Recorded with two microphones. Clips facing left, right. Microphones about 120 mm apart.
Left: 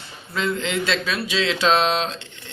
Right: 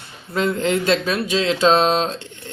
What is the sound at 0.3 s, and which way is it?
Speech, 45° right (ahead or behind).